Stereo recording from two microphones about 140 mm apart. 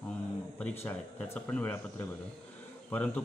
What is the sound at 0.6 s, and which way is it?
Speech, 15° left (ahead or behind).